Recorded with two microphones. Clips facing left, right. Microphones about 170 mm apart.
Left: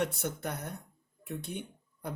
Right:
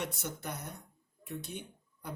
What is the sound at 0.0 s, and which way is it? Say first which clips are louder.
Speech: left 6 dB; 60° left (ahead or behind).